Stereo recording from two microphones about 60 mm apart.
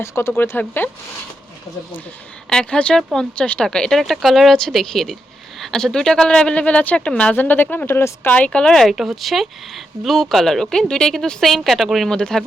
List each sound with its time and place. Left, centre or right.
0.0 s speech: left
2.5 s speech: centre
7.3 s speech: left
7.9 s speech: left
8.4 s speech: centre
8.9 s speech: centre